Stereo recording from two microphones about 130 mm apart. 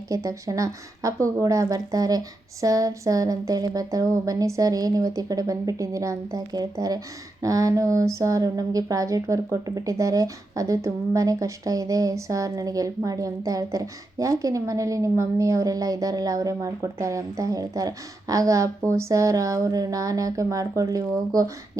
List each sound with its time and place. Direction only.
0.1 s speech: 25° right (ahead or behind)